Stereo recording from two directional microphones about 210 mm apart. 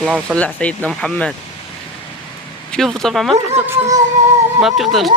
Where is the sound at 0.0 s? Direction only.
5° right (ahead or behind).